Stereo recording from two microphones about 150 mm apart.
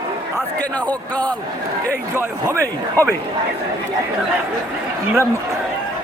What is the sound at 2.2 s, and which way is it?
Speech, 20° right (ahead or behind).